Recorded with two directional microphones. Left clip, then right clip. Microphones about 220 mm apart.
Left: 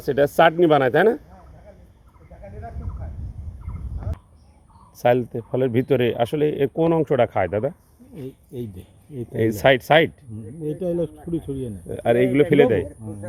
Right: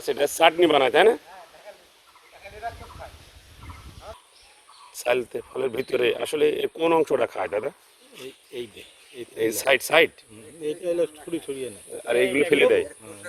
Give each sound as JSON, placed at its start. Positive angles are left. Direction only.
{"t": 0.0, "sound": "speech", "side_deg": -5}
{"t": 4.9, "sound": "speech", "side_deg": -5}
{"t": 9.4, "sound": "speech", "side_deg": -5}
{"t": 10.8, "sound": "speech", "side_deg": 30}
{"t": 12.1, "sound": "a man's voice", "side_deg": -10}